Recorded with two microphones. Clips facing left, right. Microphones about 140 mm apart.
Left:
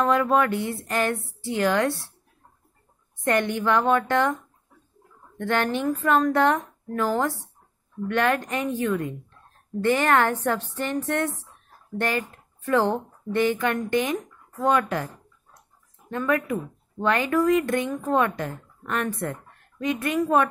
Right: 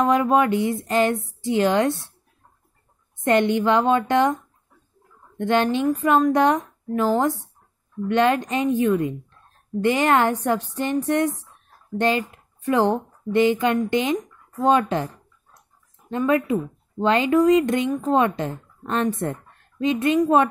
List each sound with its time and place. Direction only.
0.0 s speech: 20° right (ahead or behind)
3.2 s speech: 20° right (ahead or behind)
5.4 s a woman's voice: 20° right (ahead or behind)
16.1 s speech: 20° right (ahead or behind)